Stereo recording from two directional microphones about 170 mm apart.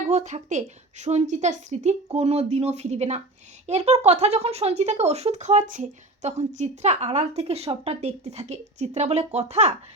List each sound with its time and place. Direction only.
0.1 s a woman's voice: 40° right (ahead or behind)